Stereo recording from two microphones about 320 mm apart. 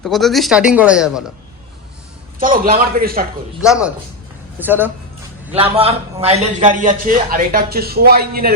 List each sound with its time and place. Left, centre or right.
0.0 s speech: centre
2.4 s a man's voice: right
3.6 s speech: centre
5.5 s a man's voice: centre